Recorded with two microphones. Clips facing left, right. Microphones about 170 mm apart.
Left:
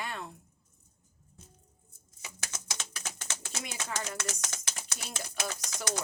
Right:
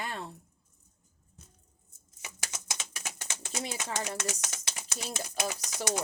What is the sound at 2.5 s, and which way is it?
Typing, 20° right (ahead or behind).